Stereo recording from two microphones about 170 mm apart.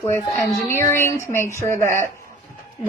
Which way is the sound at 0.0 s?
15° left (ahead or behind).